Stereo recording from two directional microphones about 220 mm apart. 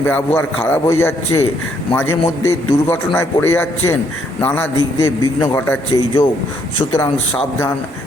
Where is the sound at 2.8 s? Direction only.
10° left (ahead or behind).